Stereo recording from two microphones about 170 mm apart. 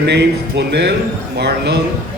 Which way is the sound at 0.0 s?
80° right.